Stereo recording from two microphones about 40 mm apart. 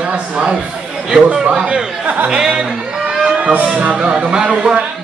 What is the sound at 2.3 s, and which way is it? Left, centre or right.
Speech, right.